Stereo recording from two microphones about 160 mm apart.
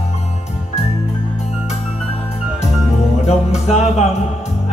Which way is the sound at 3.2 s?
40° left (ahead or behind).